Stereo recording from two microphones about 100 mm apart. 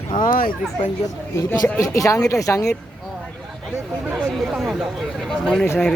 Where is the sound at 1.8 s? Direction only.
35° left (ahead or behind).